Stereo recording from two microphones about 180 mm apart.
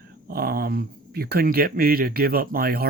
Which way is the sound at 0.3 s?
55° right (ahead or behind).